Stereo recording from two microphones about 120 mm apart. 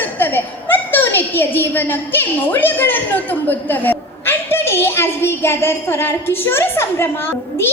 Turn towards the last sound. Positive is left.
turn(degrees=20)  # may be behind; listen again after turning